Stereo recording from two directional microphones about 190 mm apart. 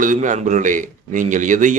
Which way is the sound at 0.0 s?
40° right (ahead or behind).